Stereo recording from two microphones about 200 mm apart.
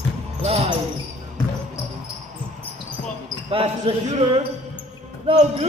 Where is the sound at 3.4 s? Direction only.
30° right (ahead or behind).